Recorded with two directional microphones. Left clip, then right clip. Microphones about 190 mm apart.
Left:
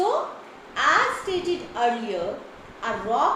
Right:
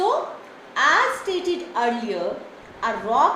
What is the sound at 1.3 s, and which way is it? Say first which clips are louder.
Speech: right 2 dB; 45° right (ahead or behind).